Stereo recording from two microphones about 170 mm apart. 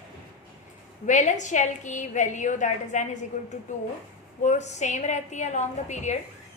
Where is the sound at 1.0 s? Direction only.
45° left (ahead or behind).